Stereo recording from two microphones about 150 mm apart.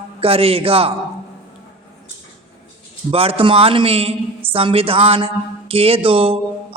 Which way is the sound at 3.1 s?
40° right (ahead or behind).